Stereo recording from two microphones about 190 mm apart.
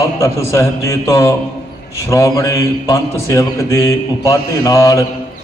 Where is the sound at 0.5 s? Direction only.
15° left (ahead or behind).